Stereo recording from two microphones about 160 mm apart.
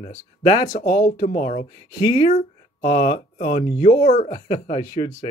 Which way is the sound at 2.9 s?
55° left (ahead or behind).